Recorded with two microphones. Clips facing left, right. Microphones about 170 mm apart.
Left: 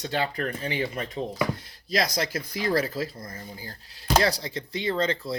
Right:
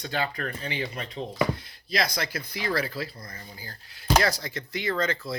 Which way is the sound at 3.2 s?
25° left (ahead or behind).